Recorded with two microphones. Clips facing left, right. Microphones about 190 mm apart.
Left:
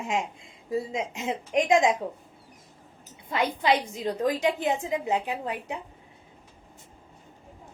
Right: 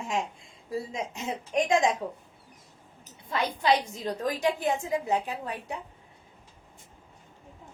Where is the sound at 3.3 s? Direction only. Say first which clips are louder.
Left 1 dB; 20° left (ahead or behind).